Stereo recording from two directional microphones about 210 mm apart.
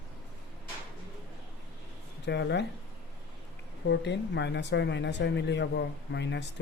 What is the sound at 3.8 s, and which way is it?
Speech, 55° left (ahead or behind).